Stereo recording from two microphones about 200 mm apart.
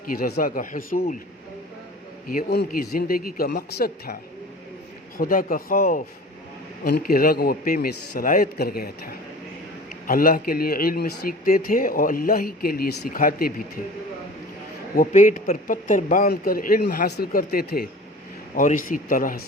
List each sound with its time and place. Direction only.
0.1 s speech: 50° left (ahead or behind)
2.3 s speech: 55° left (ahead or behind)
10.1 s speech: 45° left (ahead or behind)
14.9 s speech: 40° left (ahead or behind)